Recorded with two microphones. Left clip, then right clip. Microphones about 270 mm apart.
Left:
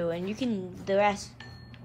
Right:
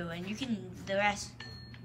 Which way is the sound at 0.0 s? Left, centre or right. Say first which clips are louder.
Left 9 dB; centre.